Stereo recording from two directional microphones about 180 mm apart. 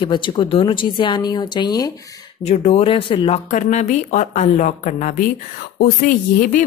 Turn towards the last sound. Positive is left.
turn(degrees=50)  # may be behind; listen again after turning